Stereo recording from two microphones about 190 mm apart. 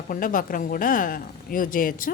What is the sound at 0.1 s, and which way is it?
A woman's voice, 45° left (ahead or behind).